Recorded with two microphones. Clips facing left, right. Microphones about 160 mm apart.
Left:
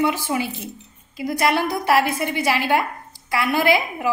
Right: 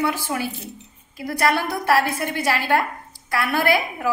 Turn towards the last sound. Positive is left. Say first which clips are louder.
# left 1 dB
turn(degrees=15)  # may be behind; listen again after turning